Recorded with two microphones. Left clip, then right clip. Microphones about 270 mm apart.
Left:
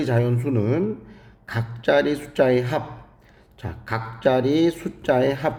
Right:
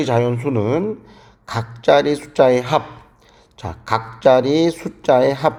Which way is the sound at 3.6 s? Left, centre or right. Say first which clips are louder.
Right 8 dB; centre.